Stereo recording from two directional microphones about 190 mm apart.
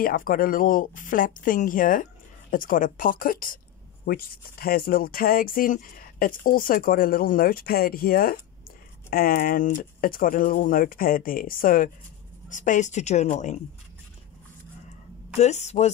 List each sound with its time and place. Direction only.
0.0 s a woman's voice: 50° left (ahead or behind)
15.3 s a woman's voice: 35° left (ahead or behind)